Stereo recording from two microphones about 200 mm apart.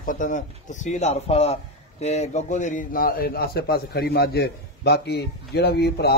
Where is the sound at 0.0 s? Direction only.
40° left (ahead or behind).